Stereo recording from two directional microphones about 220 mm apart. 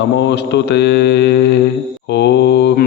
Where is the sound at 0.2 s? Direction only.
50° left (ahead or behind).